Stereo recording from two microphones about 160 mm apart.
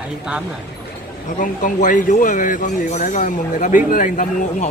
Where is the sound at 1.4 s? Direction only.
55° left (ahead or behind).